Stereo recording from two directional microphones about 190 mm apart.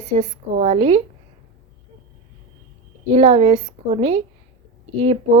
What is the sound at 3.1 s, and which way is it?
A woman's voice, 30° right (ahead or behind).